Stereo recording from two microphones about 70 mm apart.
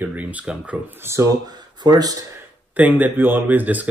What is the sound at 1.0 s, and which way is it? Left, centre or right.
Speech, right.